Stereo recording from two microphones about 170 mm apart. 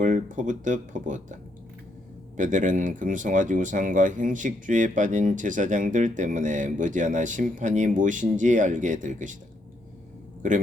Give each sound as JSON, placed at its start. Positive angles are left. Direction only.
{"t": 0.0, "sound": "speech", "side_deg": -50}